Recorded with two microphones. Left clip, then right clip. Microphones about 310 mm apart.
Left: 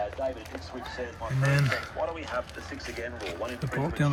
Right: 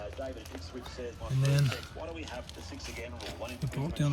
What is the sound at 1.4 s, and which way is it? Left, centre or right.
Speech, centre.